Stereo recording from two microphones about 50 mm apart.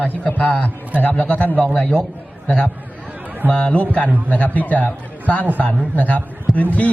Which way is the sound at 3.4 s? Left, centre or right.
Left.